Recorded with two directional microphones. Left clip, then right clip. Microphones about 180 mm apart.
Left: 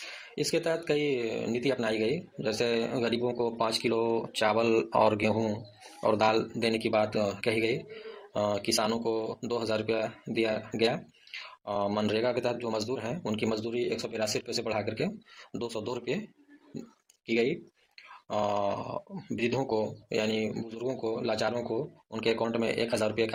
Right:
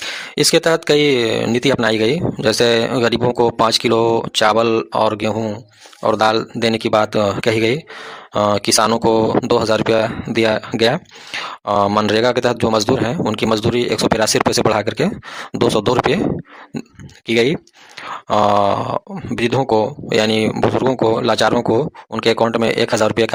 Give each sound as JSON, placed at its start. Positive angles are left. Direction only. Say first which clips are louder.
{"t": 0.3, "sound": "speech", "louder": "right 15 dB", "side_deg": -40}
{"t": 17.2, "sound": "speech", "louder": "right 13 dB", "side_deg": -35}